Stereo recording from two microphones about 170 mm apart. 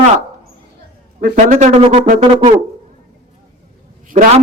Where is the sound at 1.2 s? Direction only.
50° right (ahead or behind).